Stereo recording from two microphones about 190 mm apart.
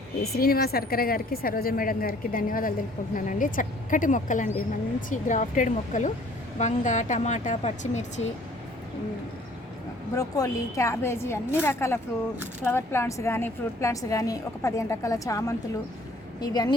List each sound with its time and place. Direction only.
0.2 s a woman's voice: 50° left (ahead or behind); by 8.3 s 35° left (ahead or behind)
10.2 s a woman's voice: 20° left (ahead or behind)